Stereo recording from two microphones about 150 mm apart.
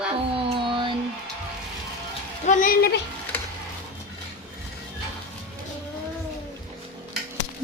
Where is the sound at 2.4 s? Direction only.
60° left (ahead or behind).